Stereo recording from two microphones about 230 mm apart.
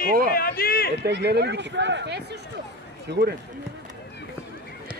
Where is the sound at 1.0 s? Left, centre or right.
Right.